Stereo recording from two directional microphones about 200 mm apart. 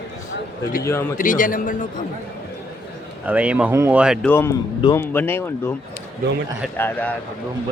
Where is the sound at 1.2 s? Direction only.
40° left (ahead or behind).